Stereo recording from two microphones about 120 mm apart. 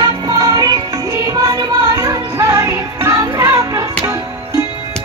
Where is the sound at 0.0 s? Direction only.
30° right (ahead or behind).